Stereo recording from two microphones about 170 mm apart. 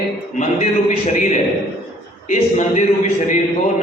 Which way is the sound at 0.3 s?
45° left (ahead or behind).